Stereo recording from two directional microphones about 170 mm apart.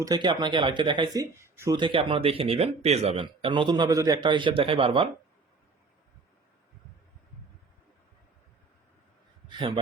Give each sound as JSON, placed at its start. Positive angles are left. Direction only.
{"t": 0.0, "sound": "speech", "side_deg": -25}
{"t": 1.8, "sound": "speech", "side_deg": -30}
{"t": 9.5, "sound": "a man's voice", "side_deg": -25}